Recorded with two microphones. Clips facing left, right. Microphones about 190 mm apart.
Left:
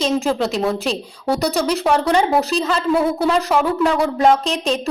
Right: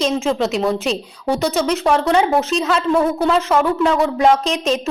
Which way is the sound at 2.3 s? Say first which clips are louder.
Even; 35° left (ahead or behind).